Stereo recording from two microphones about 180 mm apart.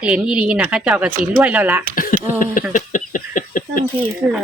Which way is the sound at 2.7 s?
45° left (ahead or behind).